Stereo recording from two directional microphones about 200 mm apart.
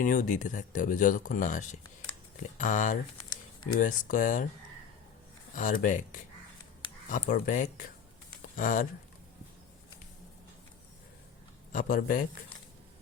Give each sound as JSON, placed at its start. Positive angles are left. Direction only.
{"t": 0.0, "sound": "speech", "side_deg": 40}
{"t": 5.5, "sound": "speech", "side_deg": 40}
{"t": 11.7, "sound": "speech", "side_deg": 45}